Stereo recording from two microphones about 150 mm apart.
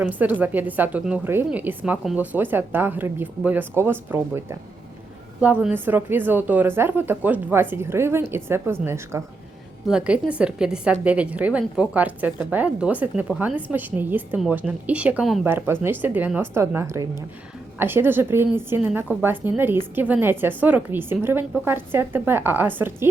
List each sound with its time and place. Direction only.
0.0 s a woman's voice: 10° right (ahead or behind)
9.8 s a woman's voice: 5° right (ahead or behind)